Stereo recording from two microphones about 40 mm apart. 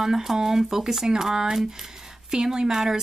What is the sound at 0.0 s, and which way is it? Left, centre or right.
Speech, centre.